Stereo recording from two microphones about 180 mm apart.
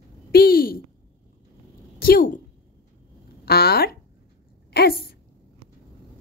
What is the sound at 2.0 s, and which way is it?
Speech, 55° left (ahead or behind).